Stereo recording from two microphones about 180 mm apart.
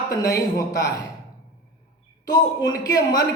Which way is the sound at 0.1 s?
20° left (ahead or behind).